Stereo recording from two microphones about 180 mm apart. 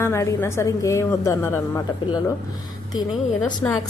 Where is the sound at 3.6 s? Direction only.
15° left (ahead or behind).